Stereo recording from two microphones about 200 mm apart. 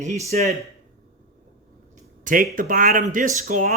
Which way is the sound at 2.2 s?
45° right (ahead or behind).